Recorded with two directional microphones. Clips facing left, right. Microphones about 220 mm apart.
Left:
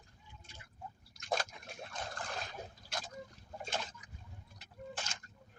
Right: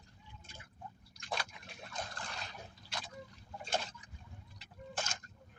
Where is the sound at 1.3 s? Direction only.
45° left (ahead or behind).